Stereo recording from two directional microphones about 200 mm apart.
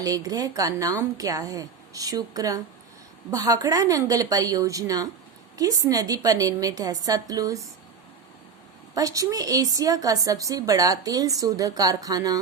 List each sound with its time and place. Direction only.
0.0 s a woman's voice: 20° right (ahead or behind)
9.0 s a woman's voice: 15° right (ahead or behind)